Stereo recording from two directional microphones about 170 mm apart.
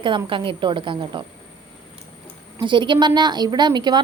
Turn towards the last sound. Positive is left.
turn(degrees=-25)  # may be behind; listen again after turning